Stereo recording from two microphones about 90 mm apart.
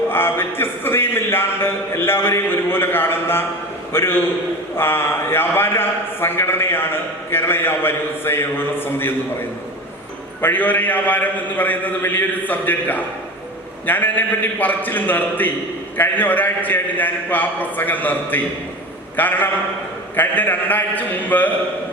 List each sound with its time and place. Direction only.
0.1 s a man's voice: 25° left (ahead or behind)
10.4 s a man's voice: 20° left (ahead or behind)